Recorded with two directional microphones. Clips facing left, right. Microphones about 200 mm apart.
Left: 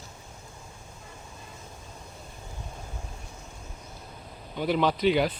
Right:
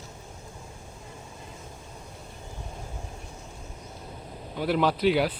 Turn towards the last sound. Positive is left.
turn(degrees=-5)  # may be behind; listen again after turning